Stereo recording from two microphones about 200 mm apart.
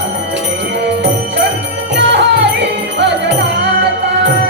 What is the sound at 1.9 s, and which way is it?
Music, 60° right (ahead or behind).